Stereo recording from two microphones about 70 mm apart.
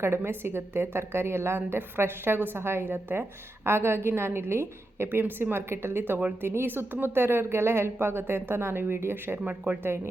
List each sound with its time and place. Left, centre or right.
0.0 s a woman's voice: right